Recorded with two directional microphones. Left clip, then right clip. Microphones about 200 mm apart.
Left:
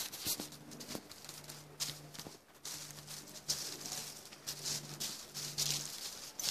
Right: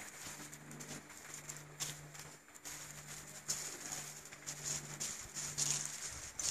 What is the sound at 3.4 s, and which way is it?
Bird, 40° right (ahead or behind).